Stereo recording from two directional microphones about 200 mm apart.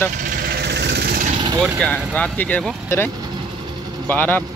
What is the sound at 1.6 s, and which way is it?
Speech, 5° left (ahead or behind).